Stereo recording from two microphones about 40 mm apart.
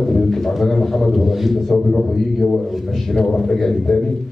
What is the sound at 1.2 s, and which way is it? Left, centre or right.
Speech, centre.